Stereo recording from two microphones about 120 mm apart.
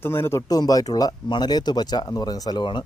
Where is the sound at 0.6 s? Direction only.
30° left (ahead or behind).